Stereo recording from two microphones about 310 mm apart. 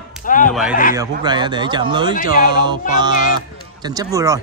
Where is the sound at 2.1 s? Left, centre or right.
Left.